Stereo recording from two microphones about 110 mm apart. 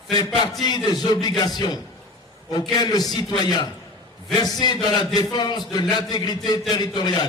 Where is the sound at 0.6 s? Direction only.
40° left (ahead or behind).